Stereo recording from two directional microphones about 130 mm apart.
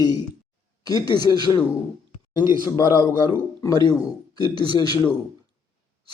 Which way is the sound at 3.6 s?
30° left (ahead or behind).